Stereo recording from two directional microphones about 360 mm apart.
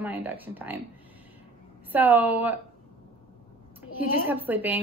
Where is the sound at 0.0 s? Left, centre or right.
Centre.